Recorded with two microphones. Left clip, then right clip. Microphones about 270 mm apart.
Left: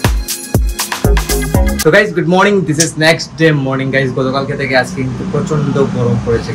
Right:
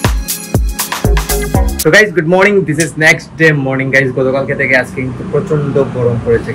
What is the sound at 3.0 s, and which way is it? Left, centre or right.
Speech, centre.